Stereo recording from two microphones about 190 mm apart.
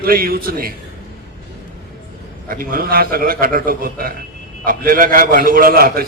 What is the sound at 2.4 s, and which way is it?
A man's voice, 50° right (ahead or behind).